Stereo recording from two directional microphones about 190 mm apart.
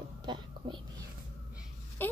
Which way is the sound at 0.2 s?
25° right (ahead or behind).